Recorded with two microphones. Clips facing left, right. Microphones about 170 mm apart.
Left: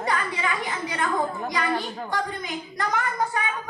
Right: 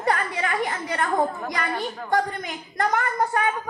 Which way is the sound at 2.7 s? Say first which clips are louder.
Right 4 dB; 55° right (ahead or behind).